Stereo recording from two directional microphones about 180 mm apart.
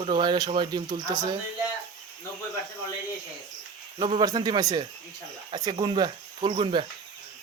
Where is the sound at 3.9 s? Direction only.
25° right (ahead or behind).